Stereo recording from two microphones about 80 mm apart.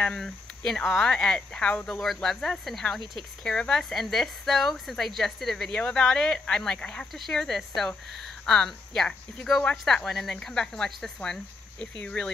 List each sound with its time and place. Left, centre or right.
0.0 s a woman's voice: centre
7.1 s a woman's voice: centre
10.0 s a woman's voice: centre